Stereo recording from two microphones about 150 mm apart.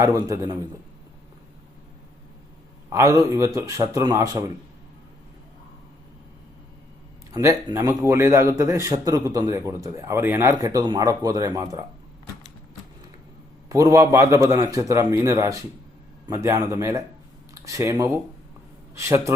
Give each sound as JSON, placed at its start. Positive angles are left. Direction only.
{"t": 0.0, "sound": "a man's voice", "side_deg": -20}
{"t": 2.9, "sound": "a man's voice", "side_deg": -20}
{"t": 7.3, "sound": "a man's voice", "side_deg": -20}
{"t": 13.7, "sound": "a man's voice", "side_deg": -20}